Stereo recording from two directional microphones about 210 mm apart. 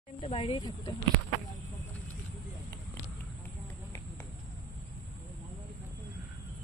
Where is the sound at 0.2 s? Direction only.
25° left (ahead or behind).